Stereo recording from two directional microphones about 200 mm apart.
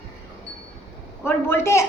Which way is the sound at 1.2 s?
10° left (ahead or behind).